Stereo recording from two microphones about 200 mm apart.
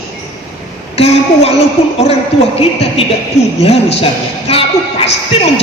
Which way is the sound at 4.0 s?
30° left (ahead or behind).